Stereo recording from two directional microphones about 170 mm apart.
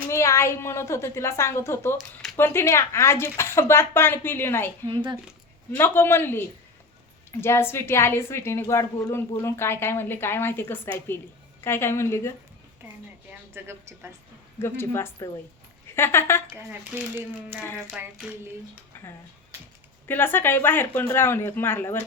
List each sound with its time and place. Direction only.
0.1 s a woman's voice: 15° left (ahead or behind)
5.7 s a woman's voice: 15° left (ahead or behind)
13.5 s a woman's voice: 15° right (ahead or behind)
14.6 s a woman's voice: 15° left (ahead or behind)
16.9 s a woman's voice: 10° right (ahead or behind)
18.9 s a sound: 10° left (ahead or behind)
20.1 s a woman's voice: 10° left (ahead or behind)